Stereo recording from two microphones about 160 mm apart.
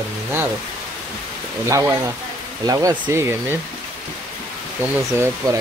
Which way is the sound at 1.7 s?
20° right (ahead or behind).